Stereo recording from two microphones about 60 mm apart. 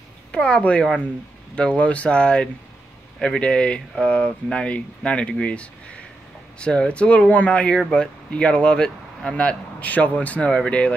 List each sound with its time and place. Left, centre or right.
0.3 s speech: centre